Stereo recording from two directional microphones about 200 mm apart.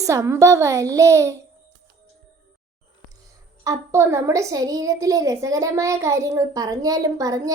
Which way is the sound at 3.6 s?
15° right (ahead or behind).